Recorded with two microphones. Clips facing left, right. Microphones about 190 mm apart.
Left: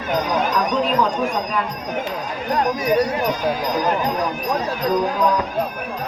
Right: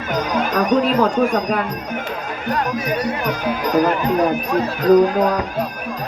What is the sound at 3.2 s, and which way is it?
Speech, 60° right (ahead or behind).